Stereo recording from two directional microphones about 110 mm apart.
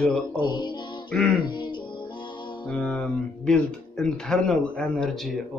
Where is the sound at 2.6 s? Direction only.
10° left (ahead or behind).